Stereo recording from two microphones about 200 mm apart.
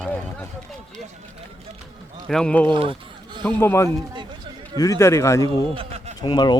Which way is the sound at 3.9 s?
25° right (ahead or behind).